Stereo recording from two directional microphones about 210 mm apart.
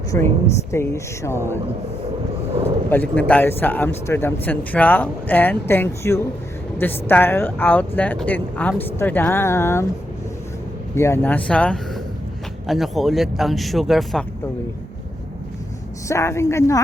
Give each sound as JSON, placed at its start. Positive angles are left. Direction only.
{"t": 0.1, "sound": "a man's voice", "side_deg": 15}
{"t": 2.9, "sound": "a man's voice", "side_deg": 10}
{"t": 10.9, "sound": "a man's voice", "side_deg": 10}
{"t": 16.0, "sound": "a man's voice", "side_deg": 15}